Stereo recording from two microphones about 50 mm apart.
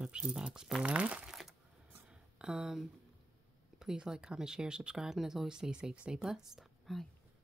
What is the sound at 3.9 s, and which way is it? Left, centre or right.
Speech, centre.